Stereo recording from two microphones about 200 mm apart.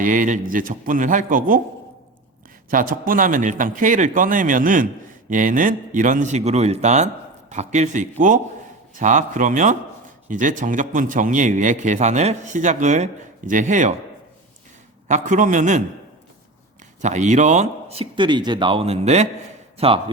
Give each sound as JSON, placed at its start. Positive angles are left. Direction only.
{"t": 0.0, "sound": "a man's voice", "side_deg": -40}
{"t": 2.6, "sound": "speech", "side_deg": -45}
{"t": 15.0, "sound": "speech", "side_deg": -40}
{"t": 17.0, "sound": "speech", "side_deg": -35}